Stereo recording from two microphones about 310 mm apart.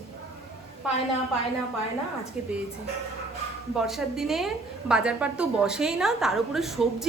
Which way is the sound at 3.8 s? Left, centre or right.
Centre.